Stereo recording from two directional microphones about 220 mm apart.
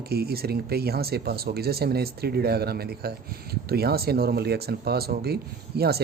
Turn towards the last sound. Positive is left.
turn(degrees=-45)  # may be behind; listen again after turning